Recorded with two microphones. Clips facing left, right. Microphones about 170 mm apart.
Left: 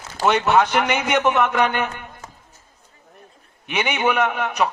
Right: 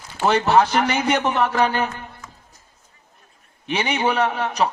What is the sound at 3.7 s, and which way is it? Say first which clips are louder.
Speech: even; 35° right (ahead or behind).